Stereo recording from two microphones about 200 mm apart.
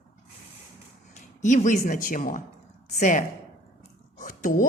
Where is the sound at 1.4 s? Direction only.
35° left (ahead or behind).